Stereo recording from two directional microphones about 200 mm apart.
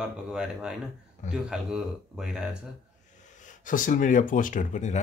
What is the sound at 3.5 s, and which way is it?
Speech, 40° left (ahead or behind).